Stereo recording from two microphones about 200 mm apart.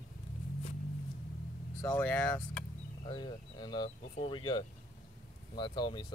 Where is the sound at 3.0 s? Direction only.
20° left (ahead or behind).